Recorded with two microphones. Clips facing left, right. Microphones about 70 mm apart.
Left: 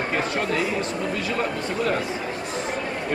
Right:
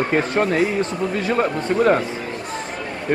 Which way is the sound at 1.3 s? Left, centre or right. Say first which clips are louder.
Right 6 dB; right.